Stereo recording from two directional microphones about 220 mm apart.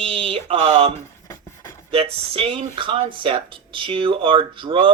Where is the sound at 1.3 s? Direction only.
10° left (ahead or behind).